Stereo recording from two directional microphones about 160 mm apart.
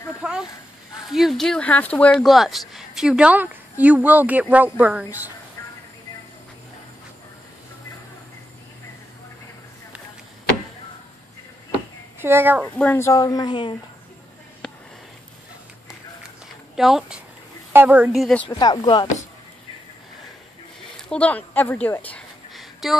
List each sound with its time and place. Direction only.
0.2 s a sound: 5° right (ahead or behind)
1.1 s speech: centre (ahead or behind)
12.2 s speech: 15° right (ahead or behind)
12.6 s speech: 10° left (ahead or behind); by 13.7 s 30° left (ahead or behind)
14.6 s sniff: 5° left (ahead or behind)
16.7 s a woman's voice: centre (ahead or behind)
18.1 s speech: 5° left (ahead or behind)
18.5 s speech: 25° left (ahead or behind)
20.9 s a woman's voice: 5° left (ahead or behind)
22.5 s a sound: centre (ahead or behind)